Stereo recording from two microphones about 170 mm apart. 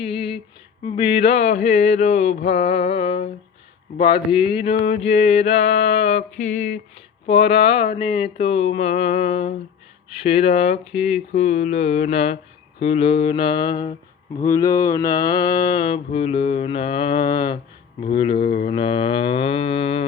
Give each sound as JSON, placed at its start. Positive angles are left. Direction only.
{"t": 0.0, "sound": "a sound", "side_deg": 35}
{"t": 0.9, "sound": "mantra", "side_deg": 30}
{"t": 7.3, "sound": "mantra", "side_deg": 35}